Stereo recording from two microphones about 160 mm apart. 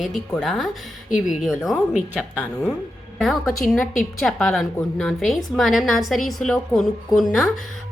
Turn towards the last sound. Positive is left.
turn(degrees=0)  # may be behind; listen again after turning